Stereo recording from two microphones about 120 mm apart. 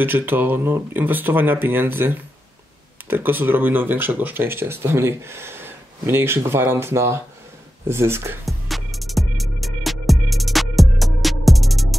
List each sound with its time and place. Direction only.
0.0 s speech: 15° right (ahead or behind)
8.5 s music: centre (ahead or behind)